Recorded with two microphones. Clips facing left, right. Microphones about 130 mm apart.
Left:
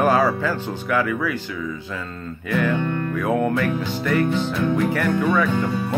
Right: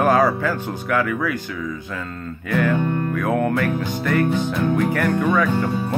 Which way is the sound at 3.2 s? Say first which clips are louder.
Left 1 dB; 15° left (ahead or behind).